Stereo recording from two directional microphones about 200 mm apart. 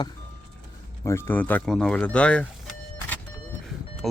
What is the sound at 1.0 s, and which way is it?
Speech, 15° left (ahead or behind).